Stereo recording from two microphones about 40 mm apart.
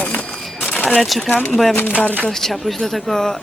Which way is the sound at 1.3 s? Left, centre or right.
Left.